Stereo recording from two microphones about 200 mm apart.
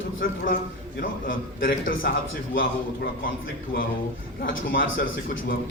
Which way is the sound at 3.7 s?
55° left (ahead or behind).